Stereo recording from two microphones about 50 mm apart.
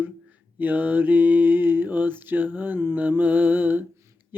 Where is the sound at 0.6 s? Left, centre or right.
Right.